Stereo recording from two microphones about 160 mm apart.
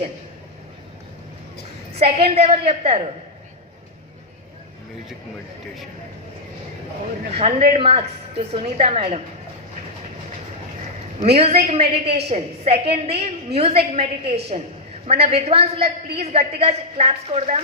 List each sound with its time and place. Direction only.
2.0 s a woman's voice: 40° right (ahead or behind)
7.3 s a woman's voice: 40° right (ahead or behind)
11.2 s a woman's voice: 40° right (ahead or behind)